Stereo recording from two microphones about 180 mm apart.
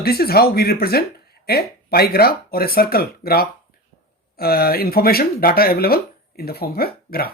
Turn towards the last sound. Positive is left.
turn(degrees=55)  # may be behind; listen again after turning